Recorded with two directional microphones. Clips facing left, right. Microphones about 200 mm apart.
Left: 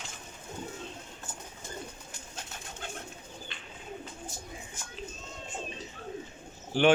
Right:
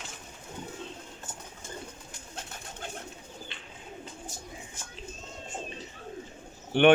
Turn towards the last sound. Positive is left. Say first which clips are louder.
# right 4 dB
turn(degrees=-60)  # may be behind; listen again after turning